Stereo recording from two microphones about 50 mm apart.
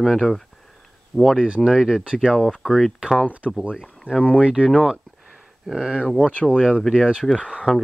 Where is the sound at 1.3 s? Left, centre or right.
Centre.